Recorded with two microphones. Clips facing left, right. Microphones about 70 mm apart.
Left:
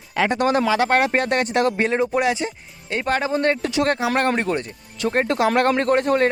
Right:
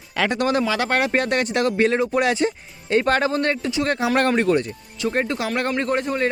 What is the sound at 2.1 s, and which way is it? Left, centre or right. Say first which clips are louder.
Speech: right 1 dB; centre.